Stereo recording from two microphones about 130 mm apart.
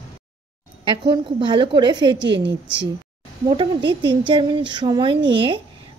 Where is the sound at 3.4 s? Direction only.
40° right (ahead or behind).